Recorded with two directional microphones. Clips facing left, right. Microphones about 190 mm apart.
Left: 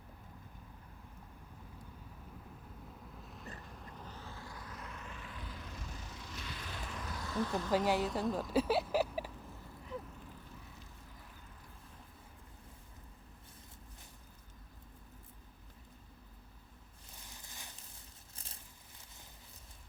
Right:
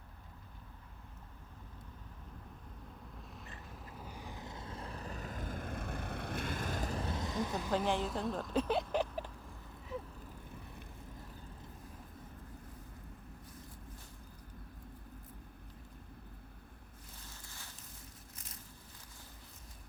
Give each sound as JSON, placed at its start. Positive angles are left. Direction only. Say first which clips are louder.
{"t": 3.2, "sound": "boat", "louder": "left 2 dB", "side_deg": 0}
{"t": 3.7, "sound": "vehicle", "louder": "right 1 dB", "side_deg": -5}
{"t": 7.9, "sound": "speech", "louder": "left 2 dB", "side_deg": 5}
{"t": 17.3, "sound": "a sound", "louder": "even", "side_deg": 15}